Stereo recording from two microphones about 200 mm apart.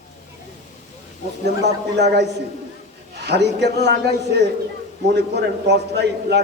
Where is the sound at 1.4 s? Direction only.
60° right (ahead or behind).